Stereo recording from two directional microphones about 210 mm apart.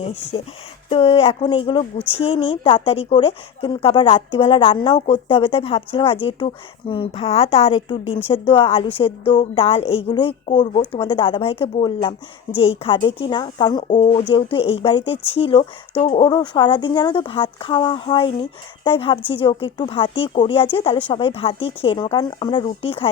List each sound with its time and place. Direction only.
0.0 s speech: 30° left (ahead or behind)
13.8 s speech: 35° left (ahead or behind)